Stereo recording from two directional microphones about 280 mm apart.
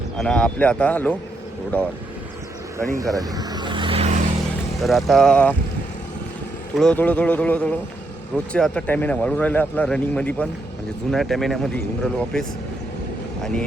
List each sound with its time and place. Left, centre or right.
0.2 s a man's voice: centre
3.0 s vehicle: centre
4.8 s a man's voice: centre
6.7 s a man's voice: centre